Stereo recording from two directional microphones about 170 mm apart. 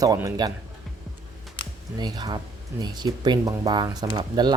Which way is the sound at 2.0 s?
25° right (ahead or behind).